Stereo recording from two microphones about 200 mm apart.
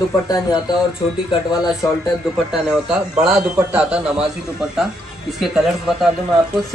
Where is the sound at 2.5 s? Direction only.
5° right (ahead or behind).